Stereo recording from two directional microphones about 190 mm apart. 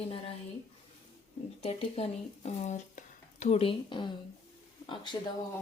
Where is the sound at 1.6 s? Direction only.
35° left (ahead or behind).